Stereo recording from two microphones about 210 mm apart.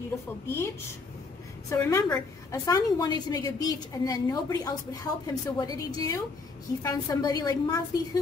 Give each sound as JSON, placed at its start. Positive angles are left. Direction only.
{"t": 0.6, "sound": "a woman's voice", "side_deg": 10}